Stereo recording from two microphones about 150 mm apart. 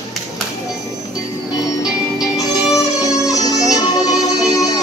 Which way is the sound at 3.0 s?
25° left (ahead or behind).